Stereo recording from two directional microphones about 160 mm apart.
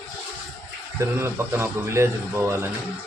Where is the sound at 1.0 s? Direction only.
15° right (ahead or behind).